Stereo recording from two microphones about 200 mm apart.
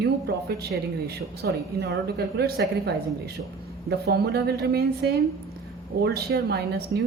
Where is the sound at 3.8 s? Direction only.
55° right (ahead or behind).